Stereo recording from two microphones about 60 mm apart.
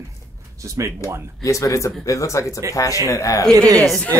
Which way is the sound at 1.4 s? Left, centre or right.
Left.